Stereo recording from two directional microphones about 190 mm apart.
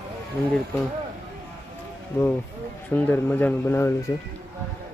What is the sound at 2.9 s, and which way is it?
Speech, 10° left (ahead or behind).